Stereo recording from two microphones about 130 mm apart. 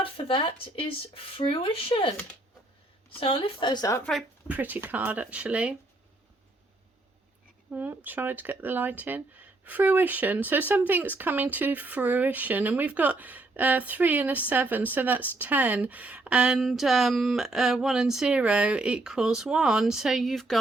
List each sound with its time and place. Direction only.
0.0 s speech: 40° left (ahead or behind)
3.2 s speech: 45° left (ahead or behind); by 4.0 s 25° left (ahead or behind)
4.4 s speech: 15° right (ahead or behind)
7.7 s speech: 15° right (ahead or behind); by 20.6 s centre (ahead or behind)